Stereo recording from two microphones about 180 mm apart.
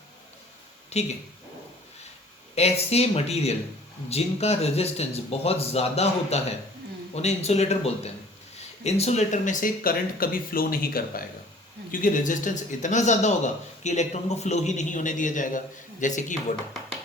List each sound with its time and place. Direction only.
0.9 s speech: 40° left (ahead or behind)
2.6 s speech: 35° left (ahead or behind)